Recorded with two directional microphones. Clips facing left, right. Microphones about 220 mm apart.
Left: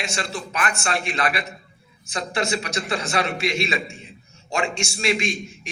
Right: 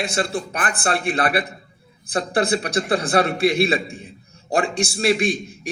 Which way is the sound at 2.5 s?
55° right (ahead or behind).